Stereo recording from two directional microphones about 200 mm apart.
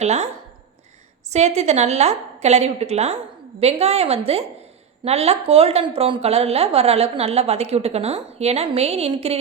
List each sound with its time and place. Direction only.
0.0 s a woman's voice: 35° right (ahead or behind)
1.3 s a woman's voice: 35° right (ahead or behind)